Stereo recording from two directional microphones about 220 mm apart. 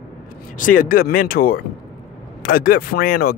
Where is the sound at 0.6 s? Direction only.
40° left (ahead or behind).